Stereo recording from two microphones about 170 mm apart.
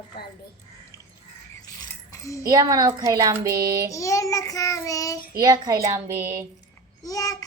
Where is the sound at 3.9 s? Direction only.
20° left (ahead or behind).